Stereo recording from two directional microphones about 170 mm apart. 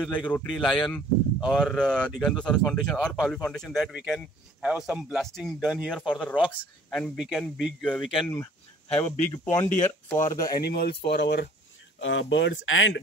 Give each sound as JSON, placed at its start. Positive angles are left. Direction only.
{"t": 0.3, "sound": "speech", "side_deg": 5}
{"t": 7.2, "sound": "speech", "side_deg": -5}
{"t": 8.9, "sound": "speech", "side_deg": 15}
{"t": 10.6, "sound": "speech", "side_deg": 70}
{"t": 12.0, "sound": "speech", "side_deg": 90}